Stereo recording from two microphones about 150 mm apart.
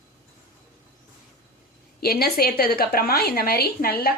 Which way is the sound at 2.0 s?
90° left.